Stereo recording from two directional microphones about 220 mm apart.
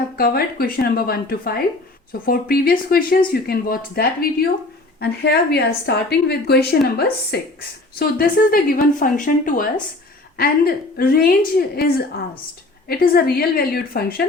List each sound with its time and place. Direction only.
0.2 s a woman's voice: 45° left (ahead or behind)